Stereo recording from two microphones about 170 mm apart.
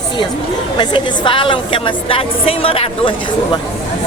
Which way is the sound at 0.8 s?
30° left (ahead or behind).